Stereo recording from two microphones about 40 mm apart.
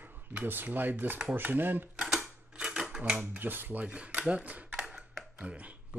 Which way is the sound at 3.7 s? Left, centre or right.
Right.